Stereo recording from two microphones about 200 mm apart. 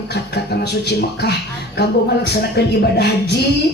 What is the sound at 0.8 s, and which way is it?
Speech, 55° left (ahead or behind).